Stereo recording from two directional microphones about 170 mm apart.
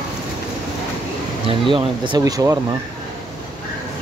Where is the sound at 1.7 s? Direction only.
30° right (ahead or behind).